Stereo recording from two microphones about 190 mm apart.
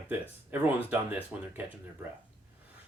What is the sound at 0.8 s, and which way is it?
Speech, 10° right (ahead or behind).